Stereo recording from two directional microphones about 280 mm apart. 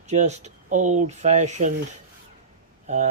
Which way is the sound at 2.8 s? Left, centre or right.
Right.